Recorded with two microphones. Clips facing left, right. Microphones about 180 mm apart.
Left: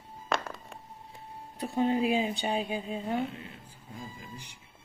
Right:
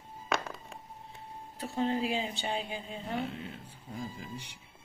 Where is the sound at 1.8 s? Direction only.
15° left (ahead or behind).